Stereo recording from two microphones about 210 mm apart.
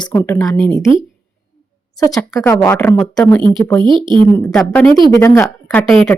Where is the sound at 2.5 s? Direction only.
5° left (ahead or behind).